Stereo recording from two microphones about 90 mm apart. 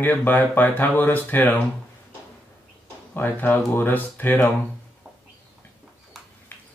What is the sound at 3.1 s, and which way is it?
Speech, 20° left (ahead or behind).